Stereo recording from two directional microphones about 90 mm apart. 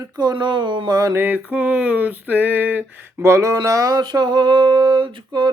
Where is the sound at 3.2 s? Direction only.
35° right (ahead or behind).